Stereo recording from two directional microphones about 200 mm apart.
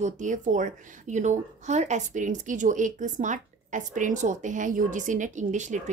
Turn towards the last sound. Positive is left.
turn(degrees=-40)  # may be behind; listen again after turning